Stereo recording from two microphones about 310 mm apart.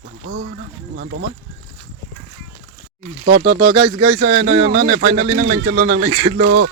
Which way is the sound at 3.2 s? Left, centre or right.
Right.